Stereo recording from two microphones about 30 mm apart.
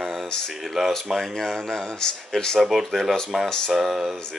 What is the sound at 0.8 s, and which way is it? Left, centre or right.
Speech, centre.